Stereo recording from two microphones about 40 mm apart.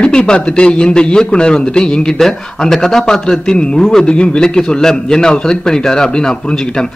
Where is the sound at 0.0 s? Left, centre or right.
Left.